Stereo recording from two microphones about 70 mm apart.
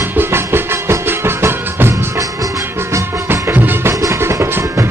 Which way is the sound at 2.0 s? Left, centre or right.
Right.